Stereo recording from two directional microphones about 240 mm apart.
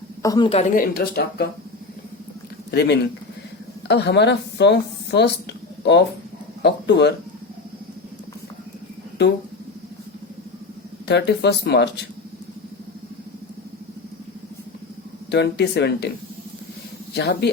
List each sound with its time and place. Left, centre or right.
0.2 s speech: centre; by 1.5 s left
2.7 s a woman's voice: left
11.1 s a woman's voice: left
15.3 s a woman's voice: left
17.2 s a woman's voice: left